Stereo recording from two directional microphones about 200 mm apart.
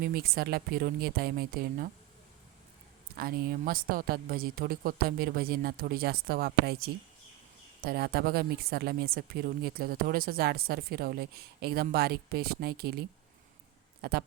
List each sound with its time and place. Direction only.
0.0 s speech: 50° right (ahead or behind)
3.2 s speech: 45° right (ahead or behind)